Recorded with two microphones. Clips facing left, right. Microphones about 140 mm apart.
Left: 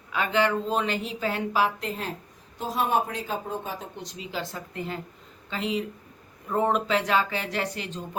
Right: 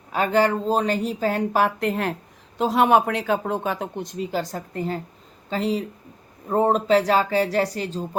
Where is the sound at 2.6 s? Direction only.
75° right (ahead or behind).